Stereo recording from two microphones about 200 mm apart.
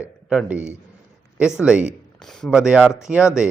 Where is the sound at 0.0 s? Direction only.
5° right (ahead or behind).